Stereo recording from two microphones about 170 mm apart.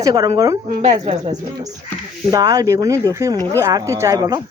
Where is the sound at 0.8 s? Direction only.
40° right (ahead or behind).